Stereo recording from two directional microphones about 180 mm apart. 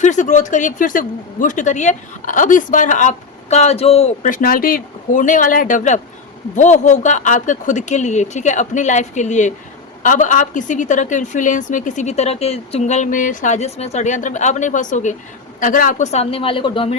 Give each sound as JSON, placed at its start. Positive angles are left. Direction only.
{"t": 0.0, "sound": "a woman's voice", "side_deg": 45}